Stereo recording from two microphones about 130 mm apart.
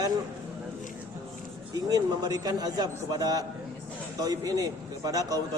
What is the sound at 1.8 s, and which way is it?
A man's voice, 30° right (ahead or behind).